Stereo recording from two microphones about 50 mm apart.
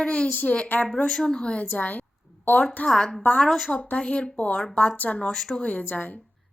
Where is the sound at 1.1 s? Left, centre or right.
Centre.